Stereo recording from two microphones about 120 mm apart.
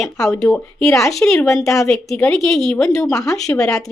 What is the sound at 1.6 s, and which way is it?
Speech, 25° left (ahead or behind).